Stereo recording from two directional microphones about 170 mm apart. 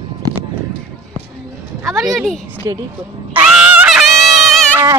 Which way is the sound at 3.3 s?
5° right (ahead or behind).